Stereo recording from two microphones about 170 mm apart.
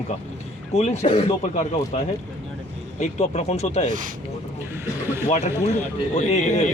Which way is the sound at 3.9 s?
50° right (ahead or behind).